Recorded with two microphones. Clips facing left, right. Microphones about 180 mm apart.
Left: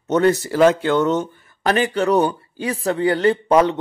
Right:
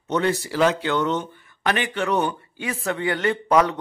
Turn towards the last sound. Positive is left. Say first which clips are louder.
# left 4 dB
turn(degrees=30)  # may be behind; listen again after turning